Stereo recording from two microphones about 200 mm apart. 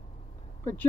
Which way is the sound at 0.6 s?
10° left (ahead or behind).